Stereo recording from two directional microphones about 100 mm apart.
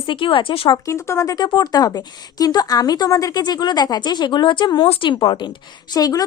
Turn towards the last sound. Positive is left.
turn(degrees=40)  # may be behind; listen again after turning